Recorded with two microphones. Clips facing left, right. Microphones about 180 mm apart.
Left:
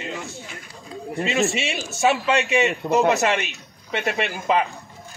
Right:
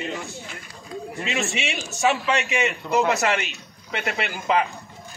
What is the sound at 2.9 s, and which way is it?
A man's voice, 20° left (ahead or behind).